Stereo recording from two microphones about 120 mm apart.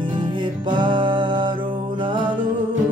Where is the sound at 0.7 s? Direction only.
40° right (ahead or behind).